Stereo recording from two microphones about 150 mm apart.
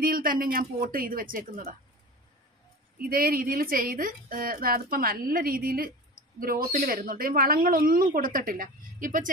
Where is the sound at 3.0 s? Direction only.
75° right (ahead or behind).